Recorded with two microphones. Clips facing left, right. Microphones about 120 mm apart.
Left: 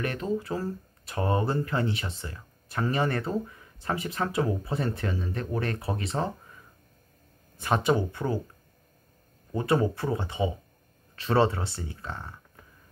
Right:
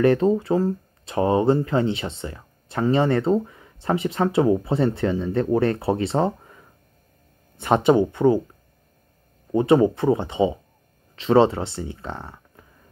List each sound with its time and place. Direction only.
0.0 s speech: 35° right (ahead or behind)
7.5 s speech: 25° right (ahead or behind)
9.5 s speech: 20° right (ahead or behind)